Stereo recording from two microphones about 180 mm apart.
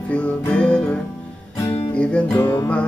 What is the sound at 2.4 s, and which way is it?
Music, 20° left (ahead or behind).